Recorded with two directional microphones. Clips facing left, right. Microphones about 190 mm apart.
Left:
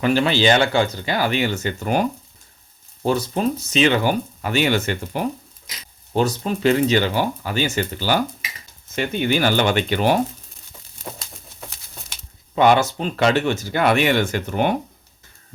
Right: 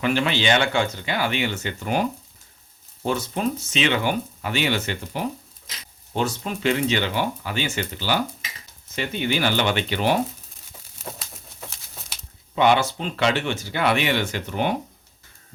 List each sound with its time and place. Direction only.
0.0 s speech: 35° left (ahead or behind)
6.1 s speech: 35° left (ahead or behind)
12.5 s speech: 45° left (ahead or behind)